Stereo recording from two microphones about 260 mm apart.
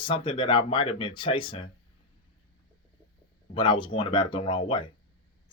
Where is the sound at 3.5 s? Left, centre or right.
Centre.